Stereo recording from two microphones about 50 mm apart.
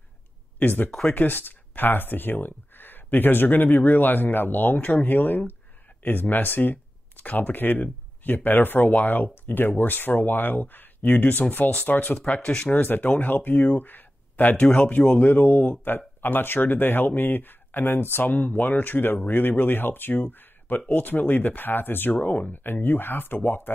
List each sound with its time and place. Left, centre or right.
0.6 s speech: left
12.3 s speech: left
12.7 s speech: left
18.3 s speech: left